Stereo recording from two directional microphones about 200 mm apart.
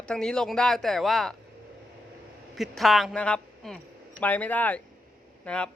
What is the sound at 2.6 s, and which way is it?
A woman's voice, centre (ahead or behind).